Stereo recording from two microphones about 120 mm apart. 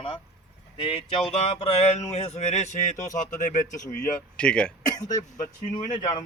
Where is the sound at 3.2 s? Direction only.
90° left.